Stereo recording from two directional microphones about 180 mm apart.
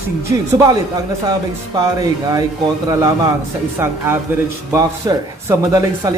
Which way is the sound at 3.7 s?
15° right (ahead or behind).